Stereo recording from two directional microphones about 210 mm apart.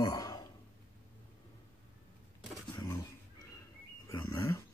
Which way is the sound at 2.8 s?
20° left (ahead or behind).